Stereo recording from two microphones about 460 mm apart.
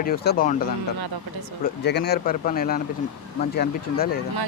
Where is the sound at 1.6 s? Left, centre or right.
Left.